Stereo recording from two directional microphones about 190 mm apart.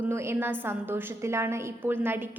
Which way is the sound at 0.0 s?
10° right (ahead or behind).